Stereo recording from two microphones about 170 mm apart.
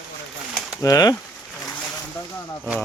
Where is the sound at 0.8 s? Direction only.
20° left (ahead or behind).